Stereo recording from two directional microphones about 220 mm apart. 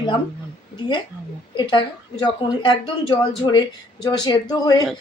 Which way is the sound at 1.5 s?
20° left (ahead or behind).